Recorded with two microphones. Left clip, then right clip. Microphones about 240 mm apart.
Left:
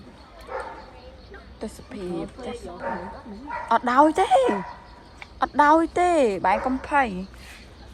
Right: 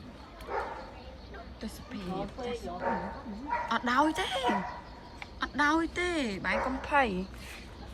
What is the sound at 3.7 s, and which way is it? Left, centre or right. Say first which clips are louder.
Speech: left 10 dB; centre.